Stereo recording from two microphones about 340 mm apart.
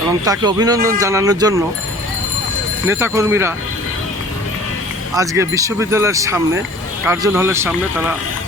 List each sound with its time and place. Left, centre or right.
0.3 s speech: centre
2.8 s speech: centre
5.1 s speech: centre